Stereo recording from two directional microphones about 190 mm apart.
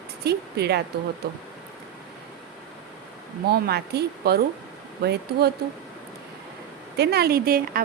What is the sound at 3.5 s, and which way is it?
A woman's voice, 55° right (ahead or behind).